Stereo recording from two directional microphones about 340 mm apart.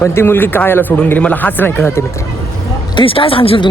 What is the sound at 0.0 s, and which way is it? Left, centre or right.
Speech, centre.